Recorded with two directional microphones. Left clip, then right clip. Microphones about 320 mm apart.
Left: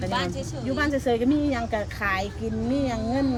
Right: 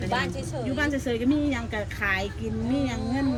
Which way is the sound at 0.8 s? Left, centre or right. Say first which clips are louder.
Left 4 dB; left.